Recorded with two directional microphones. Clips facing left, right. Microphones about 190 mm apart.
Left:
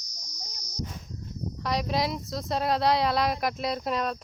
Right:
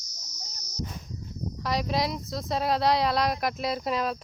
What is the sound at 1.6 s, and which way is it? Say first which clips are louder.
Speech: even; centre (ahead or behind).